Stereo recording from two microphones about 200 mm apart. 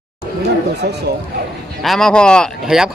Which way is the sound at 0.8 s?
55° right (ahead or behind).